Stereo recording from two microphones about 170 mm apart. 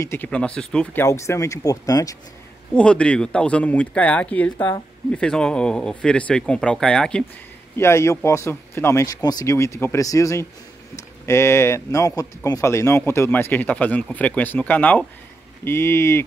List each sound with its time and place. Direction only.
0.0 s speech: 15° left (ahead or behind)
1.0 s speech: 15° left (ahead or behind)
2.7 s speech: 5° left (ahead or behind)
7.7 s speech: 15° left (ahead or behind)